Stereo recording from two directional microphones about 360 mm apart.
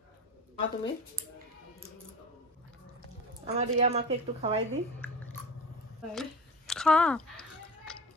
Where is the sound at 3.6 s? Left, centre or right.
Centre.